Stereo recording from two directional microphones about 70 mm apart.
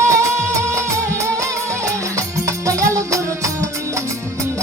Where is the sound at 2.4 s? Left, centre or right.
Right.